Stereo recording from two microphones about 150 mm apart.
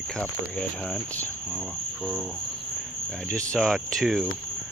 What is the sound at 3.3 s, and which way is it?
Speech, 5° left (ahead or behind).